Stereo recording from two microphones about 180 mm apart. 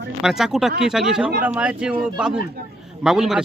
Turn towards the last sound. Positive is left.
turn(degrees=0)  # may be behind; listen again after turning